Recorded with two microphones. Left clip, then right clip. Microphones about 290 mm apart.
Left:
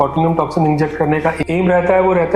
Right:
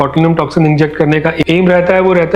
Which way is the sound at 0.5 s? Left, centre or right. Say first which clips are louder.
Right 4 dB; right.